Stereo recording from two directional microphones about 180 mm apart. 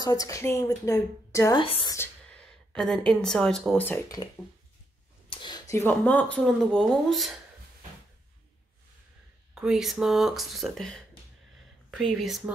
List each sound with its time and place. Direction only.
0.0 s a woman's voice: 20° left (ahead or behind)
1.6 s speech: 30° left (ahead or behind)
2.0 s speech: 5° left (ahead or behind)
5.3 s speech: 25° left (ahead or behind); by 7.2 s centre (ahead or behind)
9.6 s speech: centre (ahead or behind)